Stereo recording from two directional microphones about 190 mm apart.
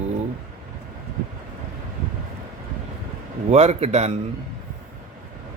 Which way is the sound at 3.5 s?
35° right (ahead or behind).